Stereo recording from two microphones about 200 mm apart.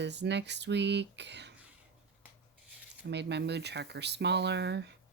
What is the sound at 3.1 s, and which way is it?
Speech, 60° right (ahead or behind).